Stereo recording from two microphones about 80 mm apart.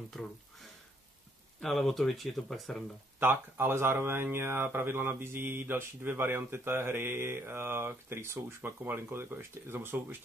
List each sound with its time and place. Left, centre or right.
1.6 s speech: centre
3.2 s speech: right